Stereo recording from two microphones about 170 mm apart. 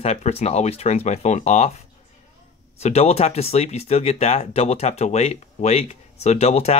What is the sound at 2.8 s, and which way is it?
Speech, 40° left (ahead or behind).